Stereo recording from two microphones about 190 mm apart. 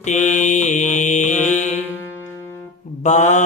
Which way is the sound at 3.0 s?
40° left (ahead or behind).